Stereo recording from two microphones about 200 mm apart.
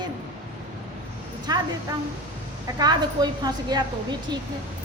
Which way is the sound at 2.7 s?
20° right (ahead or behind).